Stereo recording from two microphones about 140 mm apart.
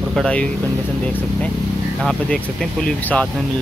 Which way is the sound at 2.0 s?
Centre (ahead or behind).